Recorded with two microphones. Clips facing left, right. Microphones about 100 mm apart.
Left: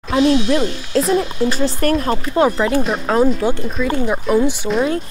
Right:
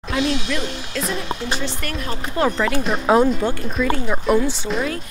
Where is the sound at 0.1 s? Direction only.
35° left (ahead or behind).